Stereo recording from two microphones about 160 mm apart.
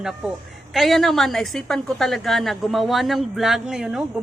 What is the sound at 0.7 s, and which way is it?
A woman's voice, centre (ahead or behind).